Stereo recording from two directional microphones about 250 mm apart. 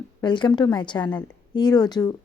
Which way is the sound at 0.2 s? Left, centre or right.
Centre.